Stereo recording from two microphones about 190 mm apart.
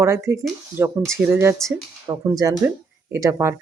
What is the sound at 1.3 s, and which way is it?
Speech, 15° right (ahead or behind).